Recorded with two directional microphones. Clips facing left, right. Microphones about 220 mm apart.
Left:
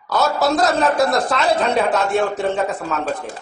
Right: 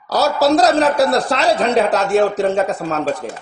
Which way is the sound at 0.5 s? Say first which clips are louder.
Right 4 dB; 80° right.